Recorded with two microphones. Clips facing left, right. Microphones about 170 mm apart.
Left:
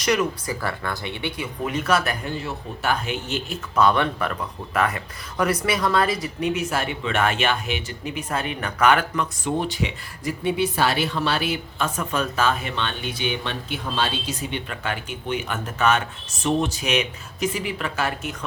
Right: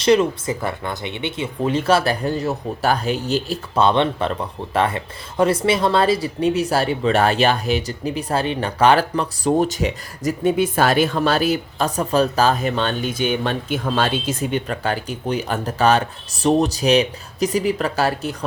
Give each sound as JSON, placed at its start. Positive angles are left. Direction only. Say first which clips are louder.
{"t": 0.0, "sound": "speech", "louder": "right 7 dB", "side_deg": -30}